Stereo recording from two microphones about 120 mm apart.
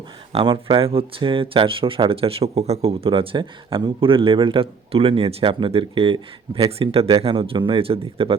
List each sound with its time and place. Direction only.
0.3 s speech: 45° right (ahead or behind)